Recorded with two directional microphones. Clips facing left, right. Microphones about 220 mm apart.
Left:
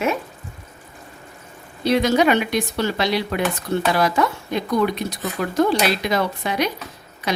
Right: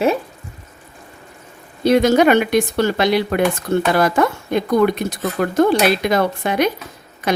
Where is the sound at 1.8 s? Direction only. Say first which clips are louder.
Right 4 dB; 50° right (ahead or behind).